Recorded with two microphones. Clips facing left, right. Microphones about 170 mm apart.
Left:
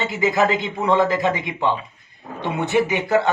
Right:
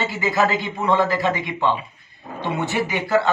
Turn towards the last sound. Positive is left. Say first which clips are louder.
# left 1 dB
turn(degrees=20)  # may be behind; listen again after turning